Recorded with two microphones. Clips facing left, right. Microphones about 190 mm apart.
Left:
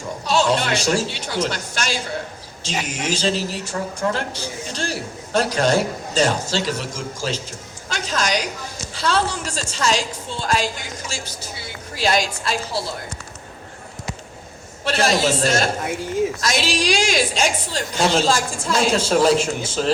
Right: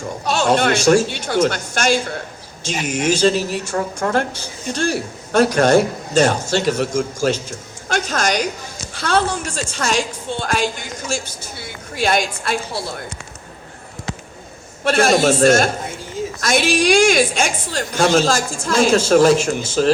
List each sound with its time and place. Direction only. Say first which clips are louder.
0.3 s a woman's voice: right 3 dB; 50° right (ahead or behind)
14.8 s a woman's voice: right 5 dB; 50° right (ahead or behind)